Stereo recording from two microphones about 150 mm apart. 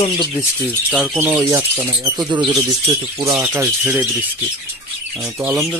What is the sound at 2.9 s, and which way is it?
Speech, 30° right (ahead or behind).